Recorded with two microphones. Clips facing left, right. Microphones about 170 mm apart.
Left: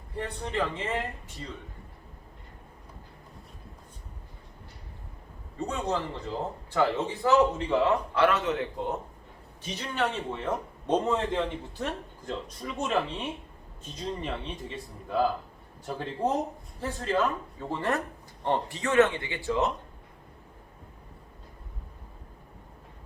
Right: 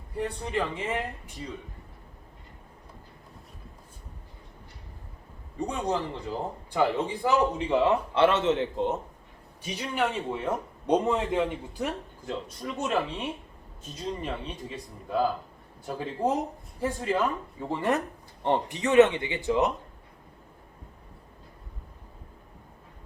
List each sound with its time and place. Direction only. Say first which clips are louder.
0.2 s a man's voice: right 1 dB; 10° right (ahead or behind)
5.5 s a man's voice: right 1 dB; 15° right (ahead or behind)
9.6 s a man's voice: right 1 dB; 10° right (ahead or behind)